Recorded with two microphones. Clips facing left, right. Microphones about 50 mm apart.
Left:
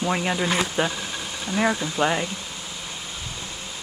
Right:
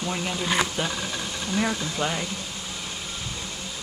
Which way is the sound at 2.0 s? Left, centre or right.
Left.